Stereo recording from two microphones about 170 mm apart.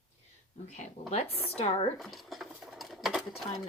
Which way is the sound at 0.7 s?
45° left (ahead or behind).